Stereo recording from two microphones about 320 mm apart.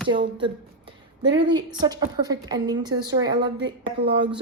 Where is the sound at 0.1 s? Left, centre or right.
Centre.